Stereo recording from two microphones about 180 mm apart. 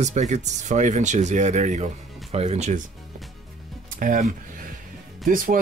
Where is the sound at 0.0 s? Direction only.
40° right (ahead or behind).